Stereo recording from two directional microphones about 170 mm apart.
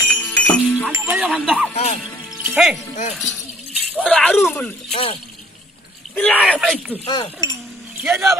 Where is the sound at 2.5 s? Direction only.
5° right (ahead or behind).